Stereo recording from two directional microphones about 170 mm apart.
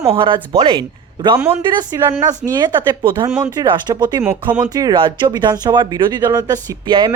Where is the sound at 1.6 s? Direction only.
25° right (ahead or behind).